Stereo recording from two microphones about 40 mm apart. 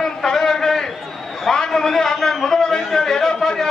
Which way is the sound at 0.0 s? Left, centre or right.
Centre.